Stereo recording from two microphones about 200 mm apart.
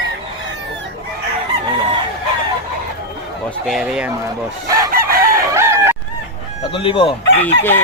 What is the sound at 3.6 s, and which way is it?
Speech, centre (ahead or behind).